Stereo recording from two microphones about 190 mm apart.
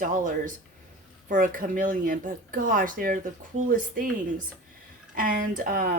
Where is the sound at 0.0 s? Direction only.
45° right (ahead or behind).